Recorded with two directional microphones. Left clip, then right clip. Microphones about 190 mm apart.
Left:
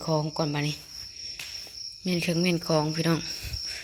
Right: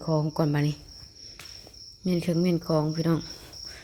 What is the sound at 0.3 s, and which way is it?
Cricket, 30° right (ahead or behind).